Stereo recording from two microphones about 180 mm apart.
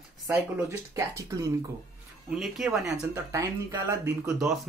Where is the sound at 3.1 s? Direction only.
15° right (ahead or behind).